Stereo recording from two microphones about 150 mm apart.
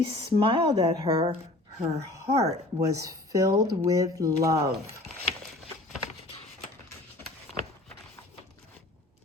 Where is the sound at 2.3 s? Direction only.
45° right (ahead or behind).